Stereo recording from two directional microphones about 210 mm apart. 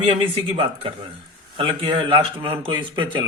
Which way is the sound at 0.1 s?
25° right (ahead or behind).